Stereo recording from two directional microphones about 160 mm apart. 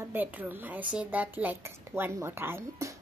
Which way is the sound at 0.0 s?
10° right (ahead or behind).